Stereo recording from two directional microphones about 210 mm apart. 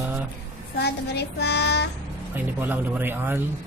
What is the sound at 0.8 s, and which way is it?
Child singing, 50° left (ahead or behind).